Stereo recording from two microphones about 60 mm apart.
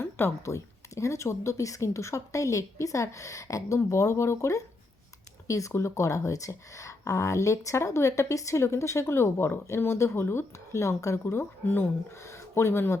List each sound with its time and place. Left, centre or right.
0.0 s speech: left